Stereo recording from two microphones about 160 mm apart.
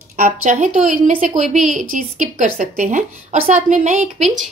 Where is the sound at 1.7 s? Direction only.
55° right (ahead or behind).